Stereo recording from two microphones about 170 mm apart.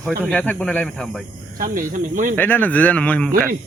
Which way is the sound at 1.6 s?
55° right (ahead or behind).